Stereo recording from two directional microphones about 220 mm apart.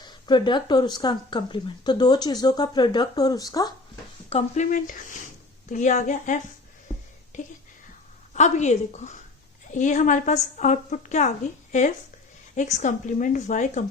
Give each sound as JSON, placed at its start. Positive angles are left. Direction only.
{"t": 0.0, "sound": "speech", "side_deg": 20}
{"t": 4.3, "sound": "a woman's voice", "side_deg": 30}
{"t": 12.5, "sound": "a woman's voice", "side_deg": 35}